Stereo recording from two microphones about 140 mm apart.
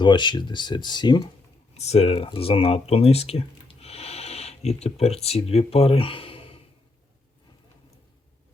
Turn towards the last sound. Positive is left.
turn(degrees=40)  # may be behind; listen again after turning